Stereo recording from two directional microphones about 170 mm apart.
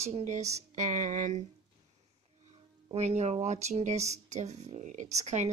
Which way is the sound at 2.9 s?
40° right (ahead or behind).